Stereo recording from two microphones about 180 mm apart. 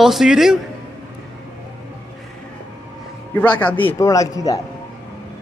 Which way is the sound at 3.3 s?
10° left (ahead or behind).